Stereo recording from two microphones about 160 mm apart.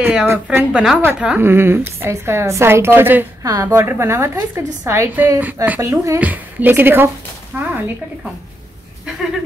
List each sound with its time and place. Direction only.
0.0 s a woman's voice: 5° right (ahead or behind)